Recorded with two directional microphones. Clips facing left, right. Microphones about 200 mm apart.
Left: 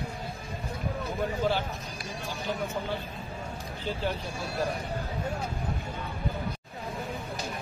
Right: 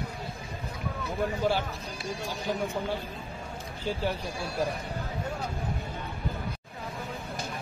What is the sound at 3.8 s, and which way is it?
Speech, 10° right (ahead or behind).